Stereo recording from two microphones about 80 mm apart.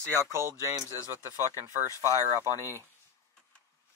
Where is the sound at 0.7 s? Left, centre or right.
Right.